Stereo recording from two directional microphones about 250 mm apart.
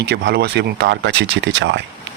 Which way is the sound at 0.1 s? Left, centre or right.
Right.